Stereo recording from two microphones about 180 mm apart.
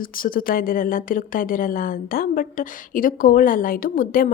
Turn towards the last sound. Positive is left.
turn(degrees=50)  # may be behind; listen again after turning